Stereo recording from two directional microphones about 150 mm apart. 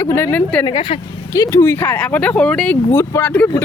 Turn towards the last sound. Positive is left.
turn(degrees=10)  # may be behind; listen again after turning